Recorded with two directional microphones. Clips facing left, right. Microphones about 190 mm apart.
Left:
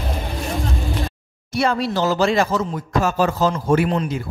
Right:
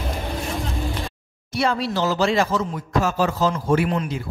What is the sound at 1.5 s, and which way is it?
A man's voice, 50° left (ahead or behind).